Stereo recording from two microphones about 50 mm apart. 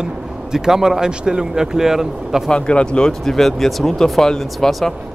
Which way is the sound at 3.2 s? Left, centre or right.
Centre.